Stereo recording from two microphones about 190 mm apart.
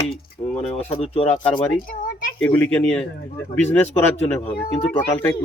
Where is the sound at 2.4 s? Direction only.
10° left (ahead or behind).